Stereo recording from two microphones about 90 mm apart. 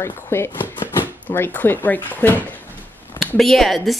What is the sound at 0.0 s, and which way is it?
Speech, 25° left (ahead or behind).